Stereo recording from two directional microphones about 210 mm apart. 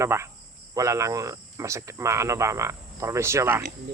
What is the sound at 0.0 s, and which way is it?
Speech, 15° right (ahead or behind).